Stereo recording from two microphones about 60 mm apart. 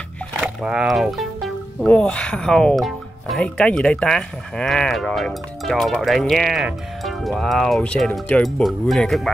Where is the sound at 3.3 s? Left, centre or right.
Centre.